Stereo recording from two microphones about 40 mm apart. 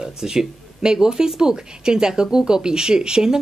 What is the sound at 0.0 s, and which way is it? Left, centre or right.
Speech, centre.